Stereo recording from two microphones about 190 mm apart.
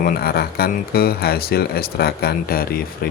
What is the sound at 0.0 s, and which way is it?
Speech, 50° left (ahead or behind).